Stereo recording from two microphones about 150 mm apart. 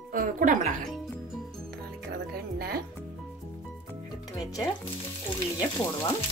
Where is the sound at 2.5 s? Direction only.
90° right.